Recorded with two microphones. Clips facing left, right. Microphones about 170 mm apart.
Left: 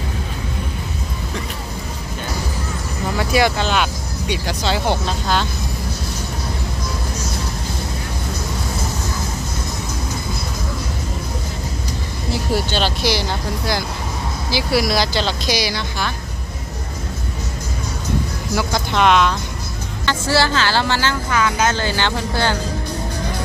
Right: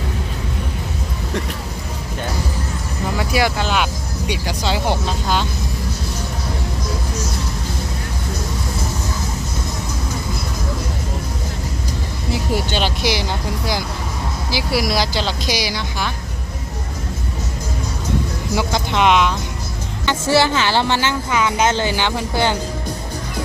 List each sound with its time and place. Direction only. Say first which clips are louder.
3.2 s speech: left 2 dB; 5° right (ahead or behind)
12.7 s speech: even; 15° right (ahead or behind)
14.5 s speech: left 2 dB; 10° right (ahead or behind)
18.5 s speech: even; 15° right (ahead or behind)